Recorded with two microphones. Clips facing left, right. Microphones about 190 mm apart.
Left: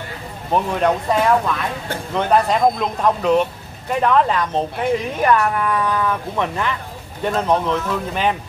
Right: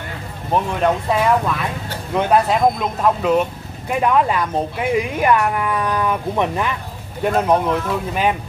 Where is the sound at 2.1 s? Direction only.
5° right (ahead or behind).